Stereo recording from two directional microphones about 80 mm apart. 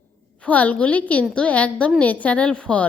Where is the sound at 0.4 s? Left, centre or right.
Centre.